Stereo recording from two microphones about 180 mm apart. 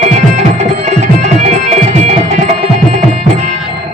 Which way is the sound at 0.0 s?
40° right (ahead or behind).